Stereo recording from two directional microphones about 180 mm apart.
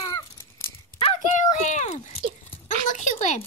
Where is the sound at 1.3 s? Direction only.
40° left (ahead or behind).